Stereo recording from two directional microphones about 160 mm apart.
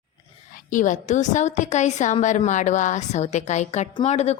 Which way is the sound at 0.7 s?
55° left (ahead or behind).